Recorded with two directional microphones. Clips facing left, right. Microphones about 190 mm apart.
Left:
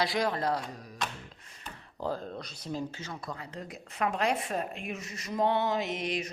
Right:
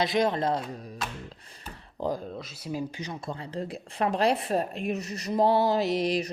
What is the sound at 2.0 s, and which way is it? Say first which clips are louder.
Speech: right 4 dB; 15° right (ahead or behind).